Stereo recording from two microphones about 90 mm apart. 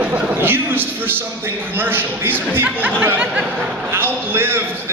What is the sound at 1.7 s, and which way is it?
A man's voice, 25° right (ahead or behind).